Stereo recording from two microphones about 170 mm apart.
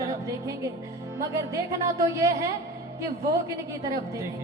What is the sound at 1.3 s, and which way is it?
A woman's voice, 15° right (ahead or behind).